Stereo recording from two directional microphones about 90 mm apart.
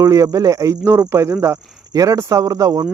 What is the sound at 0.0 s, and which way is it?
Speech, 35° right (ahead or behind).